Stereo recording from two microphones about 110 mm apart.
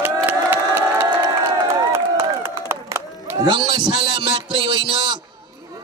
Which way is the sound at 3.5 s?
45° right (ahead or behind).